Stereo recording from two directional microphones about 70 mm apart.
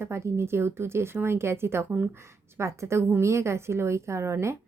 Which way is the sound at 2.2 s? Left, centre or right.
Right.